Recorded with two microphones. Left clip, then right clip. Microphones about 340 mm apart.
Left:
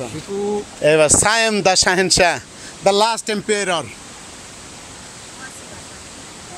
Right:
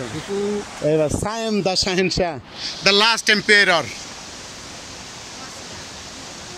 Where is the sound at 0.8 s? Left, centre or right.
Left; by 3.8 s centre.